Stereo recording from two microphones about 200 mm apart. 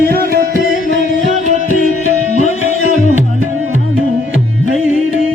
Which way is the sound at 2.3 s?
35° left (ahead or behind).